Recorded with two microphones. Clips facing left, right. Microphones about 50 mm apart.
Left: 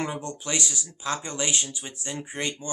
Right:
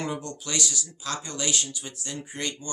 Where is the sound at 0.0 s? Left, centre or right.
Left.